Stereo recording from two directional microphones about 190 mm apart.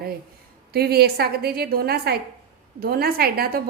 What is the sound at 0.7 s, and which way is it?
A woman's voice, 55° right (ahead or behind).